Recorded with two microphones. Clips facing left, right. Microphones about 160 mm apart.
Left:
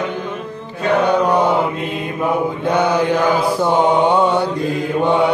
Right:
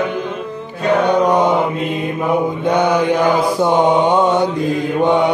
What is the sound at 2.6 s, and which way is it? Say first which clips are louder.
Mantra: right 1 dB; 10° left (ahead or behind).